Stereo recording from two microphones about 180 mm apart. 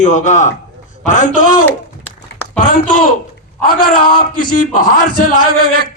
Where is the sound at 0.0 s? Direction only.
40° left (ahead or behind).